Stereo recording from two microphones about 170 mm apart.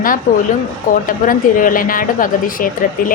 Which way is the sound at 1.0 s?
55° left (ahead or behind).